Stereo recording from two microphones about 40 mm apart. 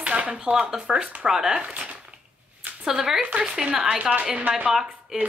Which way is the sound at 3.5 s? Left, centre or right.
Centre.